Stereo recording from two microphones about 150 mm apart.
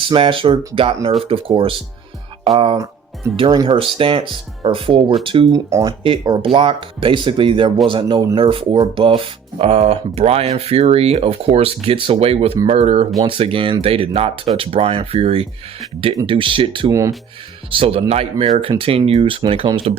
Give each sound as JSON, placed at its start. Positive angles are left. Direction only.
{"t": 0.0, "sound": "speech", "side_deg": -35}
{"t": 5.5, "sound": "speech", "side_deg": -20}
{"t": 6.0, "sound": "speech", "side_deg": -35}
{"t": 13.1, "sound": "speech", "side_deg": -35}
{"t": 16.9, "sound": "speech", "side_deg": -20}
{"t": 17.7, "sound": "speech", "side_deg": -40}